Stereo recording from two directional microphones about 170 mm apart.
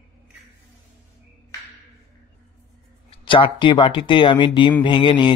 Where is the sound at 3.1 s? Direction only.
30° left (ahead or behind).